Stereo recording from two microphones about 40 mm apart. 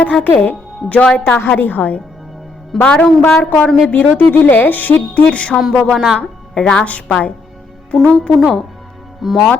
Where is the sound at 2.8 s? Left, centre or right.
Left.